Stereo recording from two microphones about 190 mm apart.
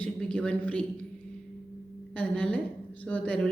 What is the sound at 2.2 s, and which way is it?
A woman's voice, 5° left (ahead or behind).